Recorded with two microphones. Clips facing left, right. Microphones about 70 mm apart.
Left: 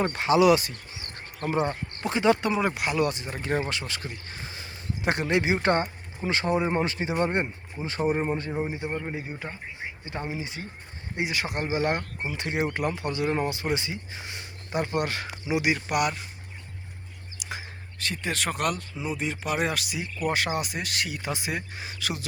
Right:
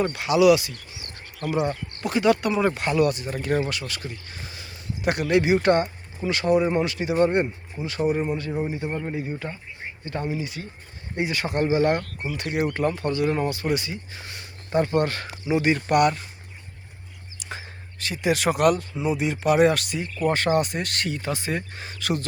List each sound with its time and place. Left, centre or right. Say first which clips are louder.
0.0 s speech: right 2 dB; left
2.6 s speech: right 4 dB; centre
3.0 s speech: right 7 dB; left
8.4 s speech: right 2 dB; left; by 16.2 s centre
17.4 s speech: right 1 dB; centre
21.2 s speech: right 3 dB; centre